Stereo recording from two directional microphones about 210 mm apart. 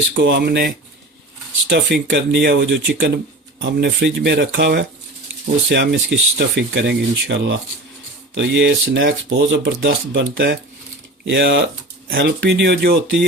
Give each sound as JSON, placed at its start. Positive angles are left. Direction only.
{"t": 0.2, "sound": "speech", "side_deg": -50}
{"t": 1.7, "sound": "speech", "side_deg": -60}
{"t": 12.0, "sound": "speech", "side_deg": -50}